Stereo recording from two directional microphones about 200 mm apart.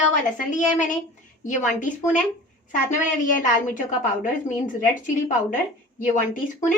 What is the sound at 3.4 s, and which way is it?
A woman's voice, 40° left (ahead or behind).